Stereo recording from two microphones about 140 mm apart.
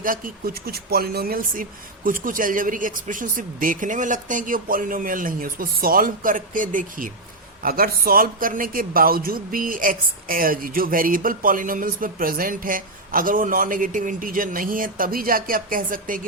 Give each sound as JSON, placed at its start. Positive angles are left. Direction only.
{"t": 0.0, "sound": "speech", "side_deg": -85}
{"t": 7.6, "sound": "a man's voice", "side_deg": -90}